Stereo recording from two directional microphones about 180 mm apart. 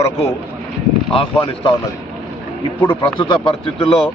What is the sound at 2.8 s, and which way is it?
Speech, 25° left (ahead or behind).